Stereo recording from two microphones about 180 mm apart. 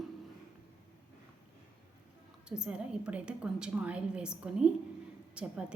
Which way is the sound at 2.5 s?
5° right (ahead or behind).